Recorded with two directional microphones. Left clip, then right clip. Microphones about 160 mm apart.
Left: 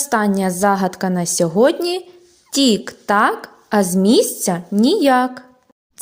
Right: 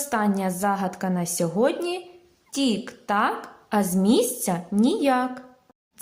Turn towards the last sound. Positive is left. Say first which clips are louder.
# left 8 dB
turn(degrees=35)  # may be behind; listen again after turning